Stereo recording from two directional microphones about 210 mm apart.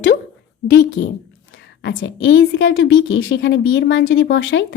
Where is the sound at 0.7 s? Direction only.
55° left (ahead or behind).